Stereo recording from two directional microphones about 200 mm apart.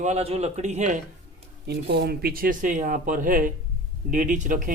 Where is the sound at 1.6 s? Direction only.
55° right (ahead or behind).